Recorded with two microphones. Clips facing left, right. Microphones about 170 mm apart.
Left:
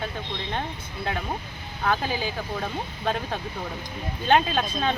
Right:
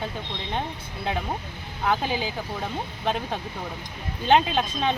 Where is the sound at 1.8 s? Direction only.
20° right (ahead or behind).